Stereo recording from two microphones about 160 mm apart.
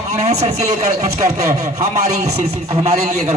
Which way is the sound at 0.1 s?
45° right (ahead or behind).